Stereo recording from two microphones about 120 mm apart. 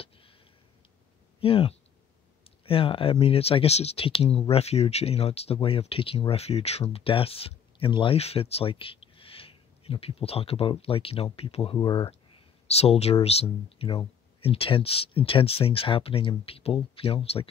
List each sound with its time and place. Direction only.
1.4 s speech: 50° left (ahead or behind)
11.8 s speech: 40° left (ahead or behind)
12.6 s speech: 60° left (ahead or behind)
13.8 s speech: 45° left (ahead or behind)